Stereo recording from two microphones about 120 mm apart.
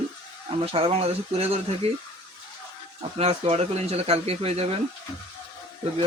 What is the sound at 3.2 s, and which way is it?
Speech, 60° right (ahead or behind).